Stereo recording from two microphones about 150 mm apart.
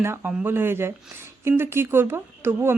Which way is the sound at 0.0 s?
15° right (ahead or behind).